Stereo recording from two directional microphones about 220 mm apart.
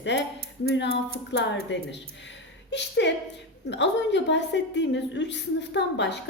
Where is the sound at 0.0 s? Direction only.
55° left (ahead or behind).